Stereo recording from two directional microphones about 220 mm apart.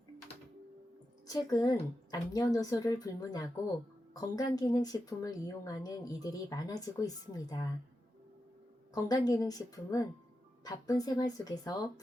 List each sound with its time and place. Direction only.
1.3 s a woman's voice: 15° left (ahead or behind)
9.0 s a woman's voice: 15° left (ahead or behind)